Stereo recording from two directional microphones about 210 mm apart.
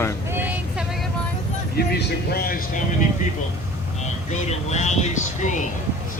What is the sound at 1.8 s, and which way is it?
Speech, 50° left (ahead or behind).